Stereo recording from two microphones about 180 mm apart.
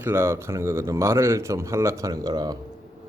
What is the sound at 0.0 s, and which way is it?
A man's voice, 15° right (ahead or behind).